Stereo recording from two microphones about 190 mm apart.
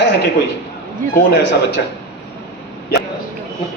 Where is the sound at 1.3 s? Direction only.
65° left (ahead or behind).